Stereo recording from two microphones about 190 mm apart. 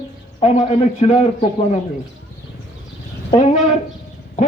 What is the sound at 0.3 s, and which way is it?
A man's voice, 35° left (ahead or behind).